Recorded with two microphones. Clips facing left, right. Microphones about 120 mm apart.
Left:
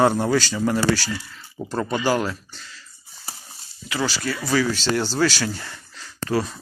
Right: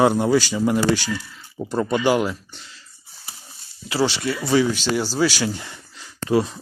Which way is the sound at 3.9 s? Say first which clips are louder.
Right 4 dB; 30° right (ahead or behind).